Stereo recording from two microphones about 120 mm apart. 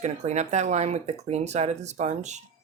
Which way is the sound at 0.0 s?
75° right (ahead or behind).